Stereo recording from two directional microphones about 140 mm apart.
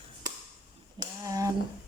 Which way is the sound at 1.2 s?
25° right (ahead or behind).